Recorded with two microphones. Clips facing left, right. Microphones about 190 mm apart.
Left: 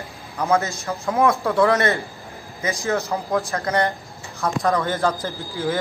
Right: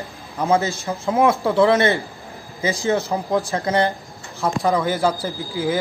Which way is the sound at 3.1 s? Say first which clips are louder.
Right 2 dB; 15° right (ahead or behind).